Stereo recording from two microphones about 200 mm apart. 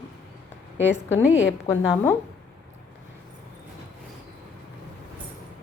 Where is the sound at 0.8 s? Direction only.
65° left (ahead or behind).